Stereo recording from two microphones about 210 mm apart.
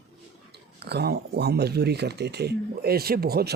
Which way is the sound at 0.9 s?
50° right (ahead or behind).